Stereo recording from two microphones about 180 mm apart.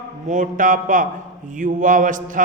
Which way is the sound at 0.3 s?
45° right (ahead or behind).